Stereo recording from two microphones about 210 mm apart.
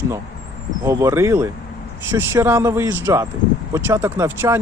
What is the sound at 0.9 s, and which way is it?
Speech, 15° right (ahead or behind).